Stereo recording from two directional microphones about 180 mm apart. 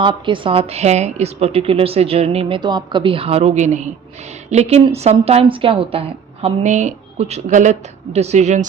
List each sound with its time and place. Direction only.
0.0 s a woman's voice: 25° right (ahead or behind)